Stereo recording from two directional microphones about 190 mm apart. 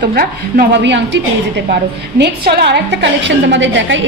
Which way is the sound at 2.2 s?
60° right (ahead or behind).